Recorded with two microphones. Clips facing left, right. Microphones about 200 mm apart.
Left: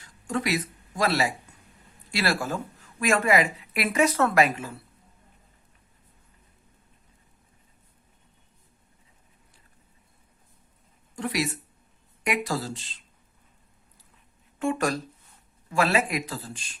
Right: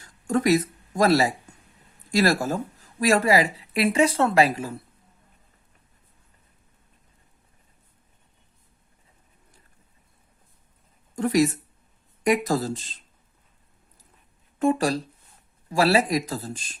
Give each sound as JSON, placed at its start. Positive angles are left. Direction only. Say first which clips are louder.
{"t": 0.0, "sound": "speech", "louder": "right 6 dB", "side_deg": -45}
{"t": 11.2, "sound": "speech", "louder": "right 8 dB", "side_deg": -45}
{"t": 14.6, "sound": "speech", "louder": "right 4 dB", "side_deg": -35}